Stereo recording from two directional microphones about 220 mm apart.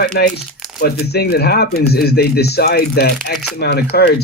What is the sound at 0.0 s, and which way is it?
Speech, 40° left (ahead or behind).